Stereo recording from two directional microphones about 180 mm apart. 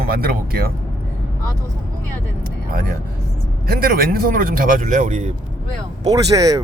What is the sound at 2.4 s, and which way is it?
Speech, 55° right (ahead or behind).